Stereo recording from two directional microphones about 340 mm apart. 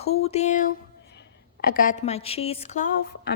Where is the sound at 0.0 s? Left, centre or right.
Centre.